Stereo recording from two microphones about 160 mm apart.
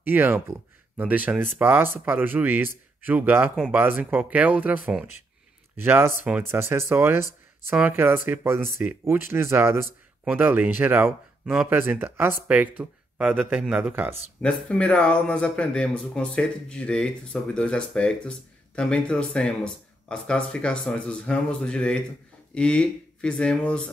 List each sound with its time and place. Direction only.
0.0 s speech: 10° right (ahead or behind)
14.4 s speech: 5° left (ahead or behind)